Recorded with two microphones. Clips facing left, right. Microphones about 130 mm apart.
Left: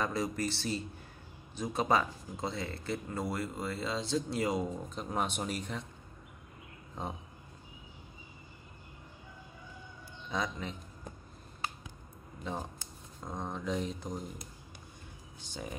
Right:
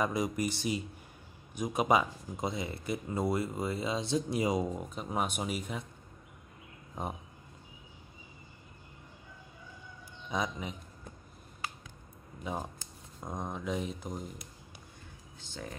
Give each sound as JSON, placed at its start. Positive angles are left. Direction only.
{"t": 0.0, "sound": "speech", "side_deg": -15}
{"t": 7.0, "sound": "speech", "side_deg": -10}
{"t": 10.3, "sound": "speech", "side_deg": -10}
{"t": 12.5, "sound": "speech", "side_deg": -10}
{"t": 15.4, "sound": "speech", "side_deg": 15}